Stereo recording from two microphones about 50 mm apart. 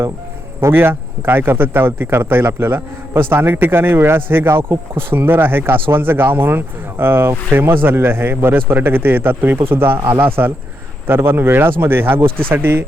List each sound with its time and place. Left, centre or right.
0.7 s speech: right